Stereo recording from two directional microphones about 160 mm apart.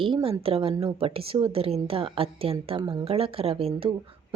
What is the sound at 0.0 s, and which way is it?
A woman's voice, 35° right (ahead or behind).